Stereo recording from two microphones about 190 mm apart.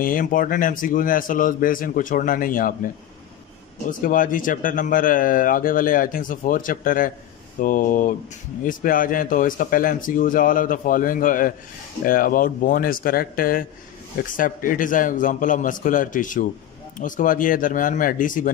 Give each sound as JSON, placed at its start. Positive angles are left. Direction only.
{"t": 0.0, "sound": "speech", "side_deg": 45}
{"t": 4.0, "sound": "speech", "side_deg": 45}